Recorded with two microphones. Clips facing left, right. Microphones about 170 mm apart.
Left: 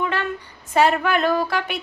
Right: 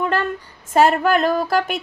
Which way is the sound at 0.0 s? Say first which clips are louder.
Right 3 dB; 40° right (ahead or behind).